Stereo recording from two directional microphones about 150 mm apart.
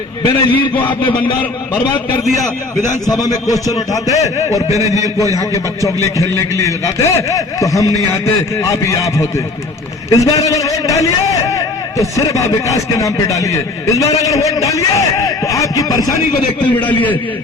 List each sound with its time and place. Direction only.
0.2 s a man's voice: 30° left (ahead or behind)
2.8 s a man's voice: 25° left (ahead or behind)
4.8 s a man's voice: 20° right (ahead or behind)
5.4 s a man's voice: 20° left (ahead or behind)
16.7 s a man's voice: 10° left (ahead or behind)